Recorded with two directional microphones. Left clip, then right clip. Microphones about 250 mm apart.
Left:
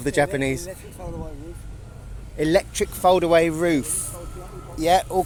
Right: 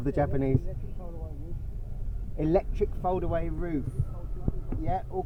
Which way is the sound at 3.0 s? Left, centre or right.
Left.